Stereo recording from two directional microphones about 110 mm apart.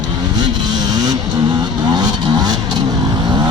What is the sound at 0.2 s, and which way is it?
Vehicle, 40° right (ahead or behind).